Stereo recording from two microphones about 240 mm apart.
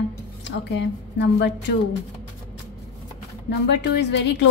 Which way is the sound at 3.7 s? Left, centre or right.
Left.